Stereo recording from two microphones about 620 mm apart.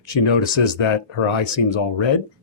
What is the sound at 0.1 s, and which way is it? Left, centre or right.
Speech, left.